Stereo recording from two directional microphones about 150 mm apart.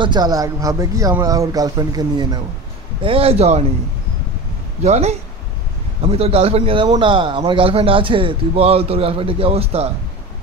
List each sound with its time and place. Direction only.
0.0 s speech: 30° right (ahead or behind)
3.0 s a man's voice: 40° right (ahead or behind)
4.8 s a man's voice: 50° right (ahead or behind)